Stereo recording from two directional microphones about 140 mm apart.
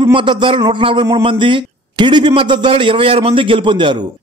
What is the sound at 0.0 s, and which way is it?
A man's voice, 35° right (ahead or behind).